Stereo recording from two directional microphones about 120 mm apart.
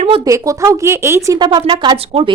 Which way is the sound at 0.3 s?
25° right (ahead or behind).